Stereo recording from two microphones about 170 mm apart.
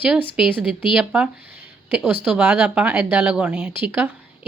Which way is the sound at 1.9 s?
10° right (ahead or behind).